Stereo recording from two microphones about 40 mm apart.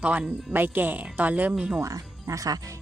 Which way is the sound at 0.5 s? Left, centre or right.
Right.